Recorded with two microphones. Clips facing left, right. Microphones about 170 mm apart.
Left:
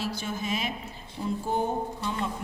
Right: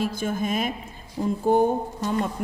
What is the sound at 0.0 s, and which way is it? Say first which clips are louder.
A woman's voice: right 6 dB; 50° right (ahead or behind).